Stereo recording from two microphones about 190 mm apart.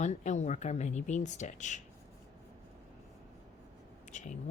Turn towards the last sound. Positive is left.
turn(degrees=40)  # may be behind; listen again after turning